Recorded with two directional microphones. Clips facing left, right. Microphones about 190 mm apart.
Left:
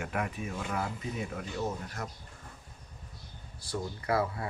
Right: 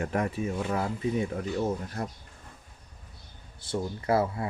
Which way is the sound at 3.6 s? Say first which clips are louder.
Right 5 dB; 25° right (ahead or behind).